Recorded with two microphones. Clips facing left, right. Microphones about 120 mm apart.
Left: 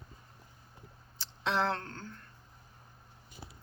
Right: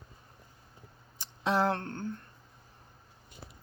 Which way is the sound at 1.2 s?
15° right (ahead or behind).